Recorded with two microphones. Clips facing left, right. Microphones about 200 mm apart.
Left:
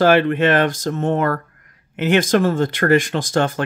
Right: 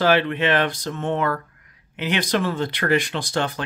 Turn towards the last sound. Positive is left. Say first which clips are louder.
# left 6 dB
turn(degrees=45)  # may be behind; listen again after turning